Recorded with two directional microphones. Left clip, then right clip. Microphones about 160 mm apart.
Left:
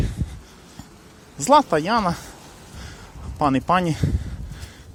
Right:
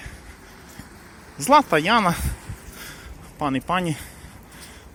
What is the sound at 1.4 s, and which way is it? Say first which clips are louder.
Speech: even; 15° left (ahead or behind).